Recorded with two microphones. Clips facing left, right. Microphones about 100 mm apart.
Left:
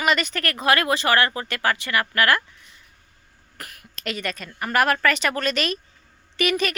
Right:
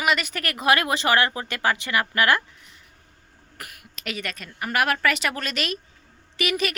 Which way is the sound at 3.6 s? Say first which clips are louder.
Left 3 dB; 5° right (ahead or behind).